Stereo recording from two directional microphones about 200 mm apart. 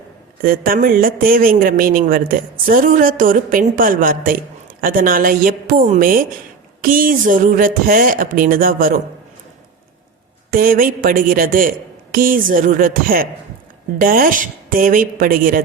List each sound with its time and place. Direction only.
0.4 s a man's voice: 45° right (ahead or behind)
10.5 s a man's voice: 45° right (ahead or behind)